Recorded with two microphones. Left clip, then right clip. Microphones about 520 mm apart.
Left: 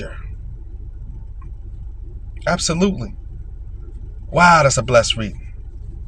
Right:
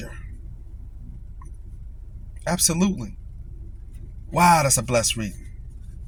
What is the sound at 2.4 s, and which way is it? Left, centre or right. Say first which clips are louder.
Speech: left 5 dB; right.